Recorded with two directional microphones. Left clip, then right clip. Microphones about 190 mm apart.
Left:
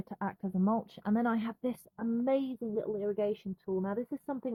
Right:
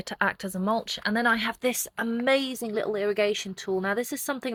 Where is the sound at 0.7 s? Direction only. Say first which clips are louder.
Right 9 dB; centre (ahead or behind).